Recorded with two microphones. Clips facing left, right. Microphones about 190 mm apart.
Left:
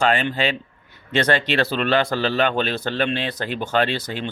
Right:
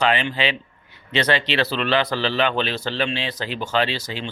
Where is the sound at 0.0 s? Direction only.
45° left (ahead or behind).